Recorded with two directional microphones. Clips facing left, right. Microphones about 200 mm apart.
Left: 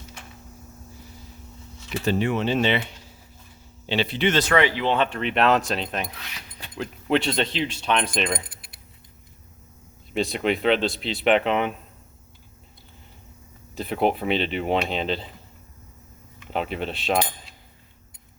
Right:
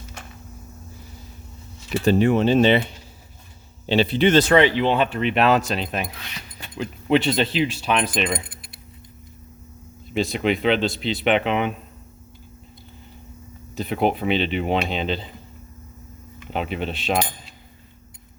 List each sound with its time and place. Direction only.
2.0 s speech: 40° right (ahead or behind); by 4.9 s 25° right (ahead or behind)
4.9 s speech: 5° right (ahead or behind)
10.2 s speech: centre (ahead or behind)
13.7 s speech: centre (ahead or behind)
16.5 s speech: centre (ahead or behind)